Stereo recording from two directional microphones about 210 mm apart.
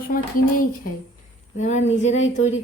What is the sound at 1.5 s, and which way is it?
Speech, 35° left (ahead or behind).